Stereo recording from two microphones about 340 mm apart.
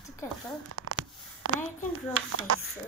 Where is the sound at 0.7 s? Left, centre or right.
Right.